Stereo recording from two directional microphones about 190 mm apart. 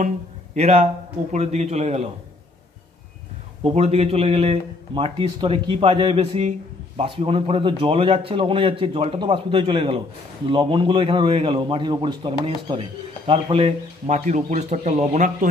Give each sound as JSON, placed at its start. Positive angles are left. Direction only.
{"t": 0.6, "sound": "a man's voice", "side_deg": -35}
{"t": 3.6, "sound": "a man's voice", "side_deg": -35}